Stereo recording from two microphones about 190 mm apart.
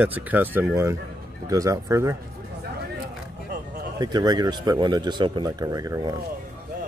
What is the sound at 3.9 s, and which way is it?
Speech, 20° right (ahead or behind).